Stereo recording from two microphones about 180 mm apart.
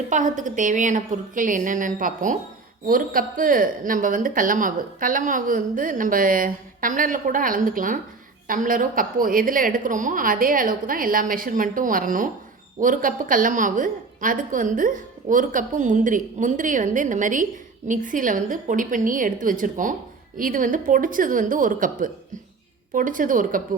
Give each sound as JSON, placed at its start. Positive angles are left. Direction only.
{"t": 0.1, "sound": "a woman's voice", "side_deg": -45}